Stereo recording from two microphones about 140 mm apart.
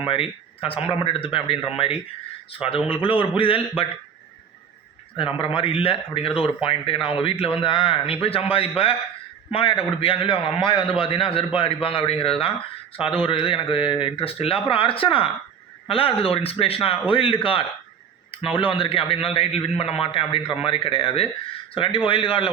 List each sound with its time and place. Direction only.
0.0 s a man's voice: 40° left (ahead or behind)
5.1 s a man's voice: 40° left (ahead or behind)